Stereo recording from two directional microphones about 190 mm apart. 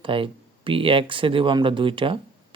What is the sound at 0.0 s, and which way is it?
Speech, 25° right (ahead or behind).